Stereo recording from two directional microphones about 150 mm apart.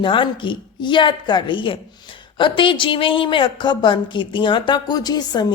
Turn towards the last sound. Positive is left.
turn(degrees=25)  # may be behind; listen again after turning